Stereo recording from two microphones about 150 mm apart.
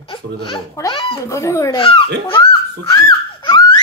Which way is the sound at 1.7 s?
35° left (ahead or behind).